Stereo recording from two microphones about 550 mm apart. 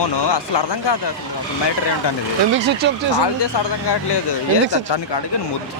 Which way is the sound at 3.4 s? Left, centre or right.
Left.